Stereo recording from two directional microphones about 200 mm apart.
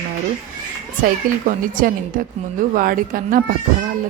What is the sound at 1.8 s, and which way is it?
Speech, 45° right (ahead or behind).